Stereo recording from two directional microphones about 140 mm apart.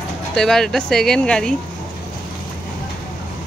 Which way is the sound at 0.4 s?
5° left (ahead or behind).